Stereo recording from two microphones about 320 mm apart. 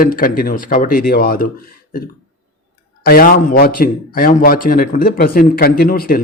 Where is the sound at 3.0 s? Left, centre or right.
Left.